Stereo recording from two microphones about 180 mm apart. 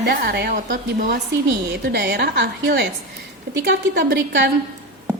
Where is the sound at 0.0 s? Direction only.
65° right (ahead or behind).